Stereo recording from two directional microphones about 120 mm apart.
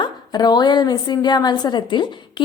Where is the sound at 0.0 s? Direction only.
35° left (ahead or behind).